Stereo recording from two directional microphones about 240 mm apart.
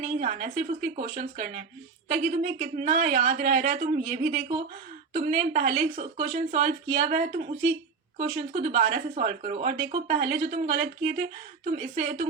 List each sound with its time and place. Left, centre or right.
0.0 s speech: right